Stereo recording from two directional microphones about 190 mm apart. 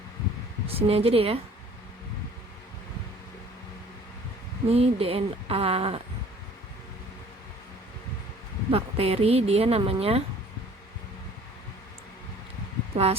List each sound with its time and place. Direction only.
0.7 s speech: 30° right (ahead or behind)
4.7 s speech: 30° right (ahead or behind)
8.7 s speech: 30° right (ahead or behind)
12.9 s speech: 35° right (ahead or behind)